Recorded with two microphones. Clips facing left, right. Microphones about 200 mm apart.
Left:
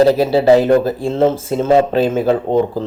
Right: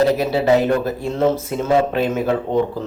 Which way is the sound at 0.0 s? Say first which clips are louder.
Left 5 dB; 30° left (ahead or behind).